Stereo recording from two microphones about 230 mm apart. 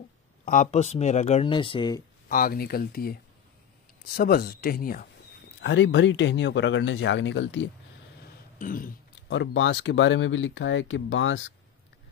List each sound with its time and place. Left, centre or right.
0.5 s speech: left
2.2 s speech: left
5.6 s speech: left
8.5 s speech: left
9.3 s speech: left